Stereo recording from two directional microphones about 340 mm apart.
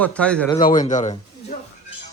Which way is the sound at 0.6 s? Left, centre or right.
Left.